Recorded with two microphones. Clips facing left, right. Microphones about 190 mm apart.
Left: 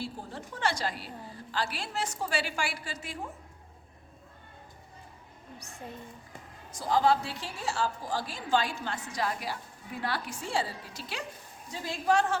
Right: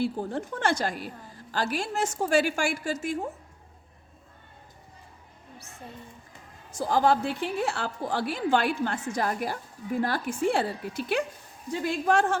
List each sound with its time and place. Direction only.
0.0 s a woman's voice: 55° right (ahead or behind)
6.7 s a woman's voice: 50° right (ahead or behind)